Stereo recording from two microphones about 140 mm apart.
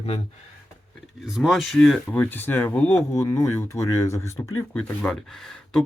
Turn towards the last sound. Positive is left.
turn(degrees=5)  # may be behind; listen again after turning